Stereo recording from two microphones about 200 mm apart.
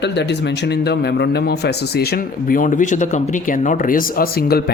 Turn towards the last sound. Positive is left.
turn(degrees=50)  # may be behind; listen again after turning